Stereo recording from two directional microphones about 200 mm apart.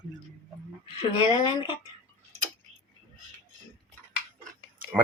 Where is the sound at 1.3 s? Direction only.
25° left (ahead or behind).